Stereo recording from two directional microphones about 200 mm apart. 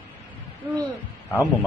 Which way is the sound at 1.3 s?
10° left (ahead or behind).